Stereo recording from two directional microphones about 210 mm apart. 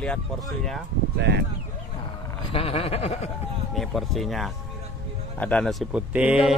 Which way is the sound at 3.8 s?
Centre (ahead or behind).